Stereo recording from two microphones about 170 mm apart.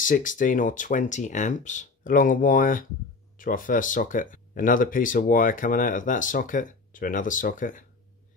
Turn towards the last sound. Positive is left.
turn(degrees=50)  # may be behind; listen again after turning